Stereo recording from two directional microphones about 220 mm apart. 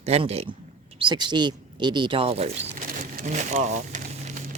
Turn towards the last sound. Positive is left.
turn(degrees=-35)  # may be behind; listen again after turning